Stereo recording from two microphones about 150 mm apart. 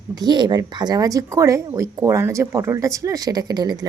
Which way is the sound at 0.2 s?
30° right (ahead or behind).